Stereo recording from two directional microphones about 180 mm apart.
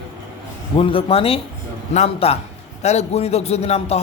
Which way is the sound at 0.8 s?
30° left (ahead or behind).